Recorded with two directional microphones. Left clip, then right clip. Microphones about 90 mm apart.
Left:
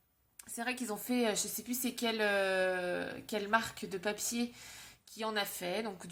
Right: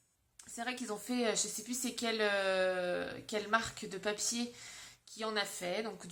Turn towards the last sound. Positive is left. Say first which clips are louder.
# even
turn(degrees=35)  # may be behind; listen again after turning